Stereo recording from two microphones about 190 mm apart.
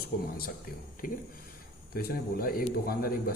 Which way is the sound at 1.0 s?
45° left (ahead or behind).